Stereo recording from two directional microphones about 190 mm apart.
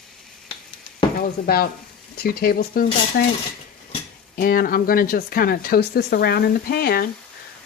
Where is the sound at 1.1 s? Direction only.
50° left (ahead or behind).